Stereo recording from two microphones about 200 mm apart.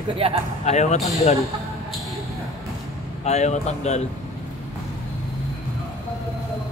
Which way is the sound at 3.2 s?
35° left (ahead or behind).